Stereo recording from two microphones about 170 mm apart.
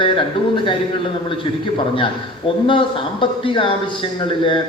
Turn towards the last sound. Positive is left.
turn(degrees=30)  # may be behind; listen again after turning